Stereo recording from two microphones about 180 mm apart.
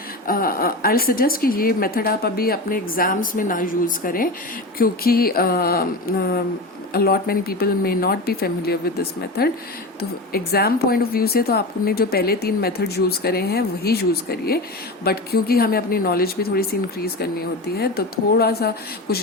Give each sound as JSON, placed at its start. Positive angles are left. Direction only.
{"t": 0.3, "sound": "a woman's voice", "side_deg": 55}